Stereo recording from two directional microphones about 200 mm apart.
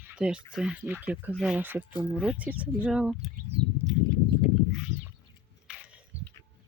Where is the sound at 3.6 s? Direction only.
25° right (ahead or behind).